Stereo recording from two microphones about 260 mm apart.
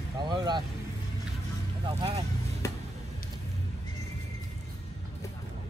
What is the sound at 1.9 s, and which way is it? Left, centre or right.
Speech, right.